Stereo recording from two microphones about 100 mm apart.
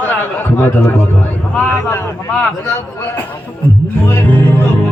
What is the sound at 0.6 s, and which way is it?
A man's voice, 20° left (ahead or behind).